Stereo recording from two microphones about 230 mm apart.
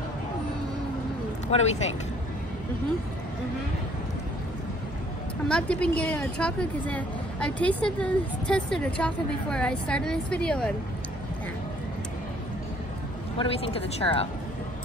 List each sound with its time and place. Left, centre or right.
1.5 s speech: left
5.5 s speech: centre
13.4 s speech: left